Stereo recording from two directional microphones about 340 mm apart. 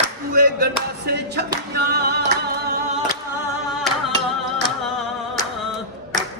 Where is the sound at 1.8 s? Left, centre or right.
Right.